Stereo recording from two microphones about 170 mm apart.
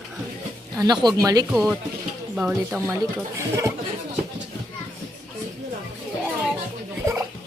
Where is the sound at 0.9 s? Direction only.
20° right (ahead or behind).